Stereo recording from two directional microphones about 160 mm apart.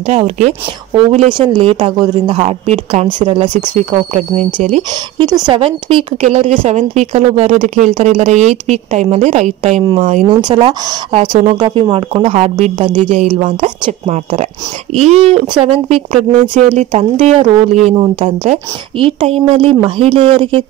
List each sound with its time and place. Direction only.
0.1 s speech: 40° right (ahead or behind)
2.4 s a woman's voice: 45° right (ahead or behind)
5.5 s a woman's voice: 35° right (ahead or behind)
11.1 s speech: 40° right (ahead or behind)
11.6 s a woman's voice: 30° right (ahead or behind)